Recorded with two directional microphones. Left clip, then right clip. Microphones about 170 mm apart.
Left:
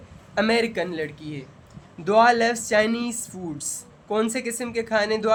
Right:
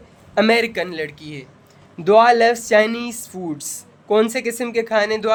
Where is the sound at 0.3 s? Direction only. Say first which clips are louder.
Right 5 dB; 50° right (ahead or behind); by 1.5 s 65° right (ahead or behind).